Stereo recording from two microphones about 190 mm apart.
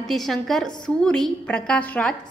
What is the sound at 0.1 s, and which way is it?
A woman's voice, centre (ahead or behind).